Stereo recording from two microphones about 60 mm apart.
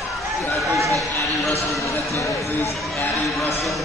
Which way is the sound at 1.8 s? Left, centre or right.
Left.